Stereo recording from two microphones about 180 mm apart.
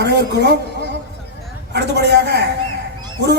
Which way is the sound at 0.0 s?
65° right (ahead or behind).